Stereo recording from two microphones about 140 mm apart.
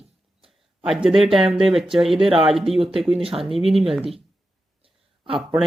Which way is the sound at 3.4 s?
Centre (ahead or behind).